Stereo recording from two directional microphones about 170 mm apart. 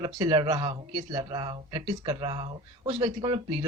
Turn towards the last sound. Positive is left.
turn(degrees=-25)  # may be behind; listen again after turning